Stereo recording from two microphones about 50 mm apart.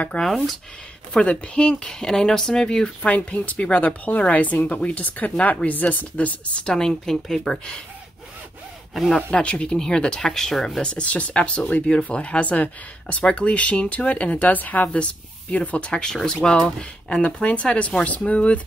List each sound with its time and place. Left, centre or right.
0.3 s speech: centre
1.2 s speech: left
3.0 s speech: left
6.6 s speech: centre
8.9 s speech: centre
9.3 s speech: left
10.8 s speech: centre
14.4 s speech: left
15.9 s speech: centre